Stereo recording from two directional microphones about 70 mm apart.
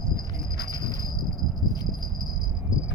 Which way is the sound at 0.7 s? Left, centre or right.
Left.